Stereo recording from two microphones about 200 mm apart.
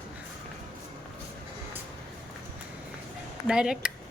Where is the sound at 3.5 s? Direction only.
5° right (ahead or behind).